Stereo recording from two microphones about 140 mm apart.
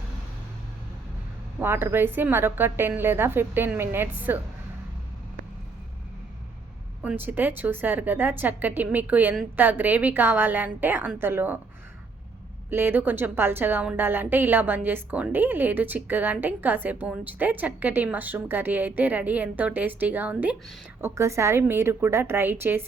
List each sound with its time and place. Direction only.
1.5 s a woman's voice: 15° right (ahead or behind)
7.0 s a woman's voice: 10° right (ahead or behind)
12.7 s a woman's voice: 15° right (ahead or behind)